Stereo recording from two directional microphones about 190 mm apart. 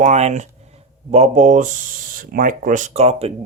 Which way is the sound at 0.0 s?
35° right (ahead or behind).